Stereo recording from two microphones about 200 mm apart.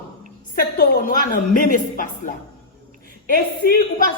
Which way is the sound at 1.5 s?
45° left (ahead or behind).